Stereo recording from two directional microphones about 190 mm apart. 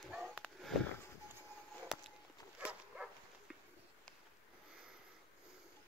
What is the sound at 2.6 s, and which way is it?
Dog, 5° right (ahead or behind).